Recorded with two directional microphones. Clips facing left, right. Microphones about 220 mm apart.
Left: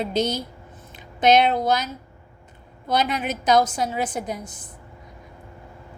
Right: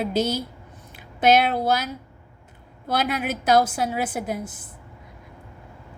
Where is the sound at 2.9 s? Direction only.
5° right (ahead or behind).